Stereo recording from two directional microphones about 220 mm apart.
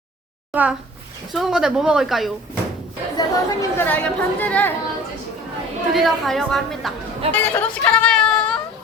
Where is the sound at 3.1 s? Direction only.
15° left (ahead or behind).